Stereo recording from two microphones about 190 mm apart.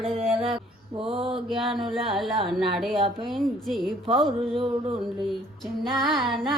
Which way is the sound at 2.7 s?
Centre (ahead or behind).